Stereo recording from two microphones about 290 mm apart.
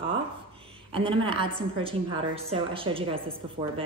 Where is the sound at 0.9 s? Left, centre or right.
Centre.